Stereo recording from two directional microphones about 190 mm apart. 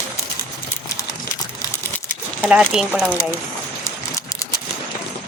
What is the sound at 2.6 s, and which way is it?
Speech, 5° right (ahead or behind).